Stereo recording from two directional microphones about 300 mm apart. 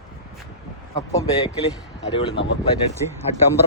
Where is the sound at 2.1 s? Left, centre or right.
Centre.